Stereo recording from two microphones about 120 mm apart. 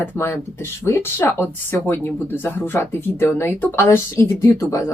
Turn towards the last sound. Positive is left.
turn(degrees=25)  # may be behind; listen again after turning